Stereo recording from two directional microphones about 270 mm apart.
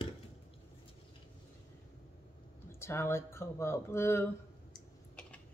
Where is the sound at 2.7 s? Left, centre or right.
Centre.